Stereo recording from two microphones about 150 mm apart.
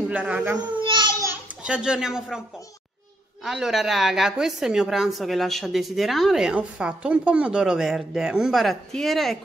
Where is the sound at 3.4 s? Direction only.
Centre (ahead or behind).